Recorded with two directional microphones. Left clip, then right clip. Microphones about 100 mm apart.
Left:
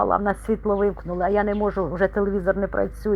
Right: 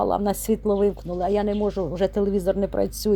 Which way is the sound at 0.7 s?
55° right (ahead or behind).